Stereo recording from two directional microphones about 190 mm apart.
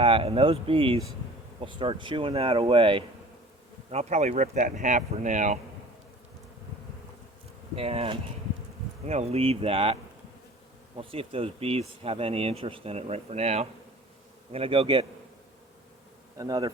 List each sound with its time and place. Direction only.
0.0 s speech: 30° right (ahead or behind)
7.8 s speech: 30° right (ahead or behind)
16.4 s speech: 20° right (ahead or behind)